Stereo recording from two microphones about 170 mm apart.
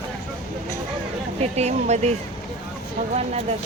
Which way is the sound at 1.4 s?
40° right (ahead or behind).